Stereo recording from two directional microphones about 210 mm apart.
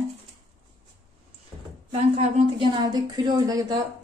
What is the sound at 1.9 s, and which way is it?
A woman's voice, 30° right (ahead or behind).